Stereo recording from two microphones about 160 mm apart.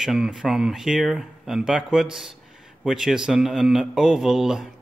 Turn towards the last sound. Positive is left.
turn(degrees=-5)  # may be behind; listen again after turning